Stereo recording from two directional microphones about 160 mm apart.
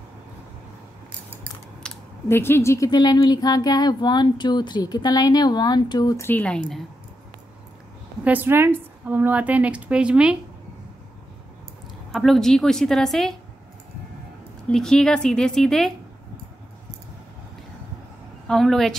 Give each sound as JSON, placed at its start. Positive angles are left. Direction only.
{"t": 1.8, "sound": "a sound", "side_deg": 5}
{"t": 2.2, "sound": "speech", "side_deg": 15}
{"t": 8.2, "sound": "a woman's voice", "side_deg": -10}
{"t": 12.1, "sound": "a woman's voice", "side_deg": 0}
{"t": 14.7, "sound": "a woman's voice", "side_deg": 5}
{"t": 18.5, "sound": "a woman's voice", "side_deg": 0}